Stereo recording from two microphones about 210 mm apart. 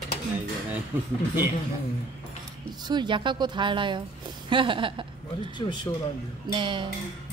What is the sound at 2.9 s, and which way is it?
Speech, 20° right (ahead or behind).